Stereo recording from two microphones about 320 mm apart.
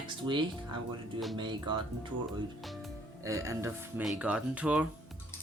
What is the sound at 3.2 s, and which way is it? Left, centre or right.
Speech, centre.